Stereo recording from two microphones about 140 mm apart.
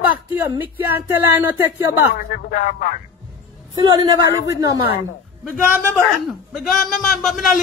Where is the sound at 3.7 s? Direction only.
30° right (ahead or behind).